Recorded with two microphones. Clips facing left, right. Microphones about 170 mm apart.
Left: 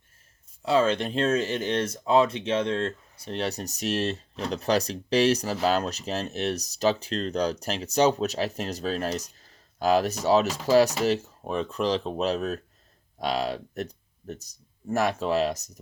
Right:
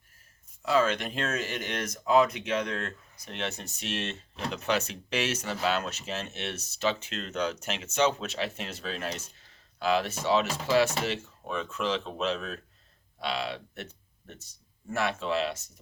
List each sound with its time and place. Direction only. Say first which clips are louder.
0.6 s speech: left 3 dB; 30° left (ahead or behind)